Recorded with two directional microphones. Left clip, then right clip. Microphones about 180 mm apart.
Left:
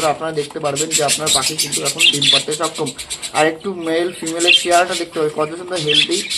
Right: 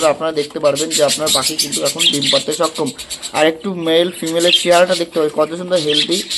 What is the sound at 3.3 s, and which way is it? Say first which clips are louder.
Speech: right 2 dB; 40° right (ahead or behind).